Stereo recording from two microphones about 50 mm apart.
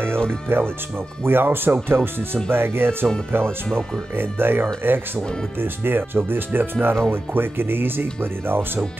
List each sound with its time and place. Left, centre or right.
0.5 s speech: right
3.4 s speech: centre
4.2 s speech: right